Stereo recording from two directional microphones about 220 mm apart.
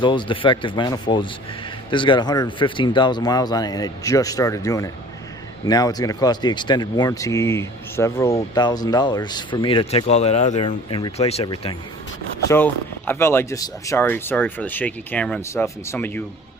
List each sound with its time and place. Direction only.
0.0 s speech: 20° left (ahead or behind)
12.5 s speech: 10° left (ahead or behind)